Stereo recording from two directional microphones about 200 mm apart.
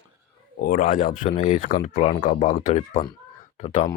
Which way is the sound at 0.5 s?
45° left (ahead or behind).